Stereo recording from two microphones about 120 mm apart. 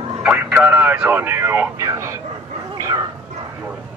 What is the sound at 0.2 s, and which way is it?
Speech, 10° right (ahead or behind).